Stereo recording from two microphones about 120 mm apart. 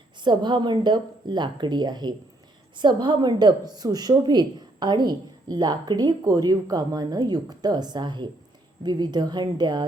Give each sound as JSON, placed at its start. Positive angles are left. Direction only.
{"t": 0.2, "sound": "a woman's voice", "side_deg": -40}